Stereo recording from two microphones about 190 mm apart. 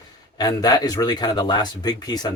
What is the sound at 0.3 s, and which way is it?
Speech, 20° left (ahead or behind).